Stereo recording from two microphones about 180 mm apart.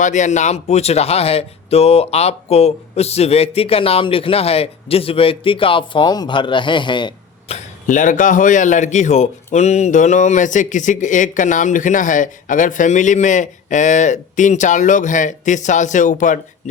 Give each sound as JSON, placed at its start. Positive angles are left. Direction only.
{"t": 0.0, "sound": "speech", "side_deg": 40}